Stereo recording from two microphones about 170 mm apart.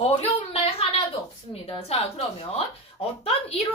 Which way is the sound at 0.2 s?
35° left (ahead or behind).